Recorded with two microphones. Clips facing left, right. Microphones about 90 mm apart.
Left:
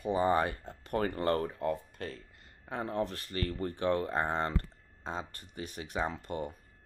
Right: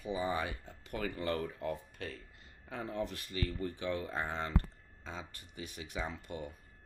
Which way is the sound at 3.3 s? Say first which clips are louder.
Left 3 dB; 50° left (ahead or behind).